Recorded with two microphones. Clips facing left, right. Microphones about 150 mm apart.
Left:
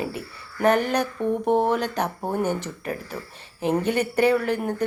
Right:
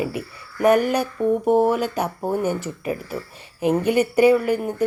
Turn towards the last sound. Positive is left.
turn(degrees=-10)  # may be behind; listen again after turning